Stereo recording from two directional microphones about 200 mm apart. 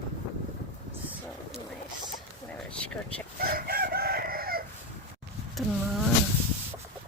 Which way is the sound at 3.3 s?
50° right (ahead or behind).